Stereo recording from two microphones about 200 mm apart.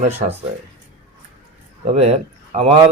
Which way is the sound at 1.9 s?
30° right (ahead or behind).